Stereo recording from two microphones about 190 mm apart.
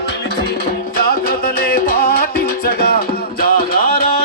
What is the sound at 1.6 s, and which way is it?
Music, 55° left (ahead or behind).